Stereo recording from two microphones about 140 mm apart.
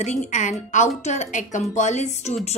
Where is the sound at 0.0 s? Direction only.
60° left (ahead or behind).